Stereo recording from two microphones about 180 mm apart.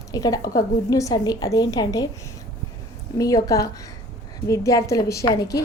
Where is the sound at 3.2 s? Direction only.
20° left (ahead or behind).